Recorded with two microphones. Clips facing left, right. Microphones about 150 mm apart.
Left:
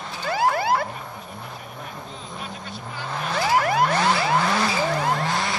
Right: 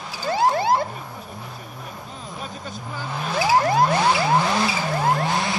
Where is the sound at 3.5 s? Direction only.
25° right (ahead or behind).